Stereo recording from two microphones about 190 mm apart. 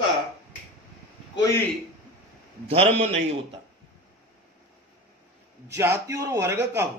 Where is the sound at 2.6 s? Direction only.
35° right (ahead or behind).